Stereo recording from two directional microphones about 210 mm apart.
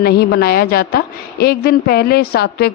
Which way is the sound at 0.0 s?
50° left (ahead or behind).